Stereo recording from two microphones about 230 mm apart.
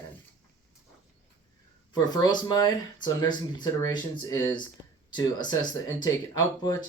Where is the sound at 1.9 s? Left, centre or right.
Centre.